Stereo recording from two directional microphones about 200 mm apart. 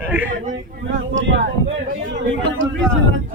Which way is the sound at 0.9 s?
65° right (ahead or behind).